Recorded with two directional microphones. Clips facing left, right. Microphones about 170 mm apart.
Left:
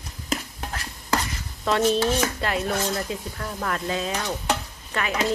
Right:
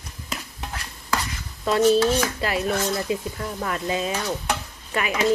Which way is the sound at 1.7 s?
Centre (ahead or behind).